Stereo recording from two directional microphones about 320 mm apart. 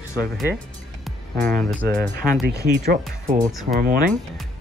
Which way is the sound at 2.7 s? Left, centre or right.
Right.